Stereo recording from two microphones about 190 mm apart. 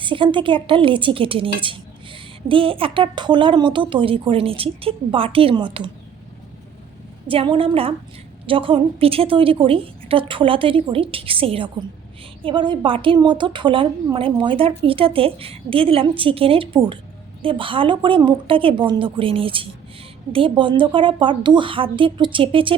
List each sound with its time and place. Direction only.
0.0 s a woman's voice: 25° right (ahead or behind)
7.3 s a woman's voice: 30° right (ahead or behind)